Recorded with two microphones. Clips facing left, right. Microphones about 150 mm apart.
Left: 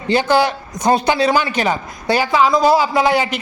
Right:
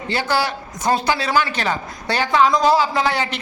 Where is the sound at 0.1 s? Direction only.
20° left (ahead or behind).